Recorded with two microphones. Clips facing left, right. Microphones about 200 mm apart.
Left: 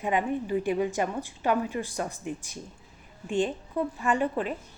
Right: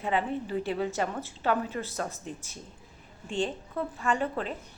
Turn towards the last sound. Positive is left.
turn(degrees=15)  # may be behind; listen again after turning